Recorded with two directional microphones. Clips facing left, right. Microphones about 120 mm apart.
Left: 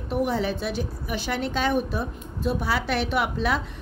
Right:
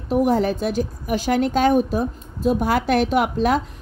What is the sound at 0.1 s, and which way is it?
A woman's voice, 45° right (ahead or behind).